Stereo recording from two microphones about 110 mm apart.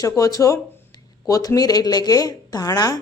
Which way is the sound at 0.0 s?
30° left (ahead or behind).